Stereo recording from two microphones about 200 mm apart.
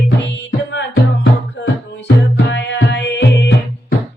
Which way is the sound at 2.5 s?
60° left (ahead or behind).